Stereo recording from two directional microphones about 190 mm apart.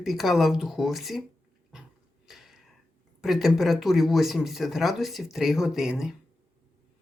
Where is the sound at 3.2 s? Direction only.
Centre (ahead or behind).